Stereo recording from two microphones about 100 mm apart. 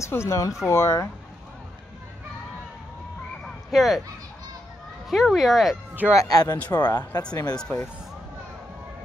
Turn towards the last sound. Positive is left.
turn(degrees=10)  # may be behind; listen again after turning